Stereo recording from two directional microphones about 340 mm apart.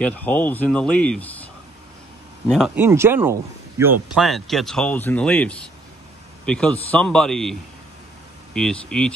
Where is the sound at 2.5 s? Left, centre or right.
Centre.